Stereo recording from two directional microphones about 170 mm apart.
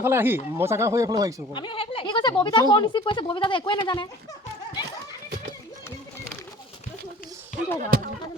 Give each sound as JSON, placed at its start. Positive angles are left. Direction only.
{"t": 0.0, "sound": "speech", "side_deg": -15}
{"t": 1.5, "sound": "speech", "side_deg": 30}
{"t": 7.8, "sound": "speech", "side_deg": -55}